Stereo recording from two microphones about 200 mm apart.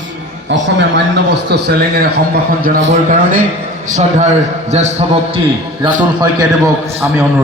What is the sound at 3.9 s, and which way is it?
A man's voice, 35° right (ahead or behind).